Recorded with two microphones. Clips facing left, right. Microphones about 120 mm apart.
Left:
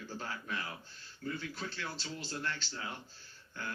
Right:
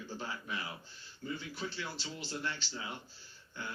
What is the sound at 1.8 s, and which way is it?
Speech, 15° right (ahead or behind).